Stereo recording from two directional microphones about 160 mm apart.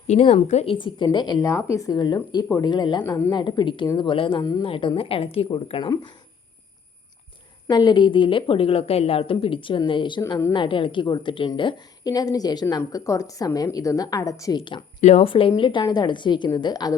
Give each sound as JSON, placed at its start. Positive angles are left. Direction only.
{"t": 0.1, "sound": "a woman's voice", "side_deg": 45}
{"t": 7.7, "sound": "a woman's voice", "side_deg": 25}
{"t": 14.6, "sound": "a woman's voice", "side_deg": 30}